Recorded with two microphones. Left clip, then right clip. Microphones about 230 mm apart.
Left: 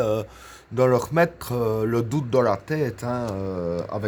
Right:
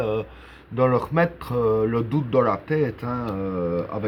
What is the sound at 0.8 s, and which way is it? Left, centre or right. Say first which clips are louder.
Speech: left 1 dB; left.